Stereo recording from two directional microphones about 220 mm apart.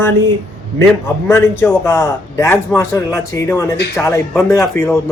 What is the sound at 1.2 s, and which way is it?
A man's voice, 10° left (ahead or behind).